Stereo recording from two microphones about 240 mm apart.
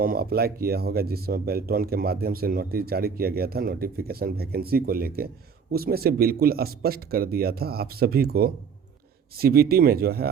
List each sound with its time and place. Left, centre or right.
0.0 s speech: right